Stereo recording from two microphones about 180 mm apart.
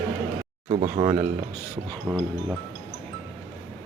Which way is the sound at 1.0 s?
25° right (ahead or behind).